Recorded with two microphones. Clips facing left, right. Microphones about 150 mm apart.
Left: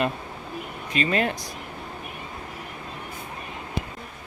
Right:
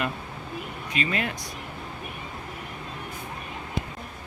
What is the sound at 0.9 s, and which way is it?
Speech, 35° left (ahead or behind).